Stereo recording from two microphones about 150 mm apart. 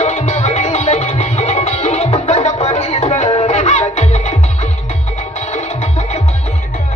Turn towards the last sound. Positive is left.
turn(degrees=50)  # may be behind; listen again after turning